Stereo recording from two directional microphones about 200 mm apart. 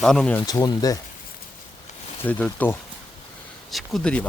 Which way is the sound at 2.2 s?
10° left (ahead or behind).